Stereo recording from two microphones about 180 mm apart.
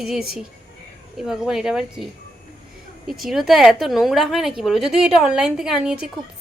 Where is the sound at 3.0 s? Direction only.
Centre (ahead or behind).